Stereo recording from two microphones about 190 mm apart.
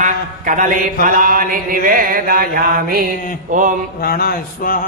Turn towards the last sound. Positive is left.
turn(degrees=45)  # may be behind; listen again after turning